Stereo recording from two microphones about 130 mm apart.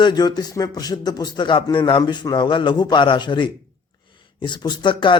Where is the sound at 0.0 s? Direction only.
35° left (ahead or behind).